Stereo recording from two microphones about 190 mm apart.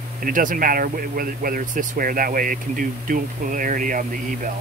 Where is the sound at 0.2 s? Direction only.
45° right (ahead or behind).